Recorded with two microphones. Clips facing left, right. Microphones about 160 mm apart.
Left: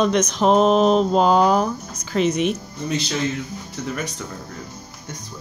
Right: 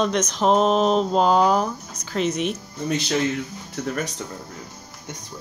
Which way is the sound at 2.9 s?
55° right (ahead or behind).